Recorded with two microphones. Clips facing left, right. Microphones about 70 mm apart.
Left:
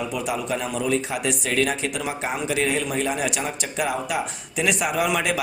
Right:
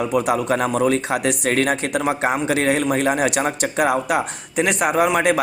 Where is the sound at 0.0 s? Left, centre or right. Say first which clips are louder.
Right 7 dB; right.